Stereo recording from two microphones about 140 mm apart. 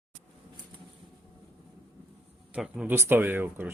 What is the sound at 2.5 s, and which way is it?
Speech, 5° right (ahead or behind).